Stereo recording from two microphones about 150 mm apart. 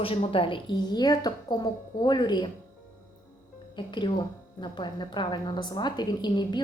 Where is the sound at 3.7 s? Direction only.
30° left (ahead or behind).